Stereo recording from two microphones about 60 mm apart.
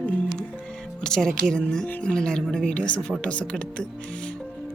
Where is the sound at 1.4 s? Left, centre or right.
Centre.